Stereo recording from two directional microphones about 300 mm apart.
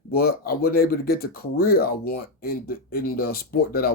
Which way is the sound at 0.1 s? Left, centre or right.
Left.